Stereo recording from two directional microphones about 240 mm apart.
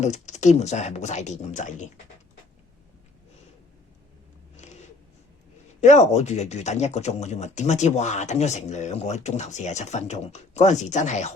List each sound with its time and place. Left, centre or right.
0.0 s speech: left
4.5 s a sound: left
5.8 s speech: left